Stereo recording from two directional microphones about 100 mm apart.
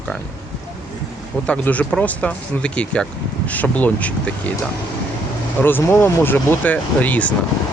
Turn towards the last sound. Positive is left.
turn(degrees=15)  # may be behind; listen again after turning